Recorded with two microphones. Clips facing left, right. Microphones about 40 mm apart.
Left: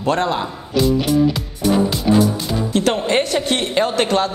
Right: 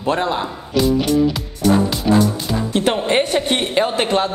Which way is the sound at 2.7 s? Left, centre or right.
Right.